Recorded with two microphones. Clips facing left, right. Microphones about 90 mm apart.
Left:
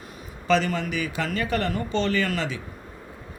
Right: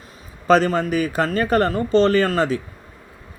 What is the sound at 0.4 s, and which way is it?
A man's voice, 40° right (ahead or behind).